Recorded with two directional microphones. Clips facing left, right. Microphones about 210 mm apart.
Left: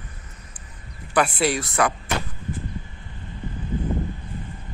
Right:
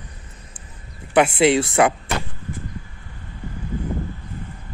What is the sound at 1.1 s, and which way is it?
Speech, 25° right (ahead or behind).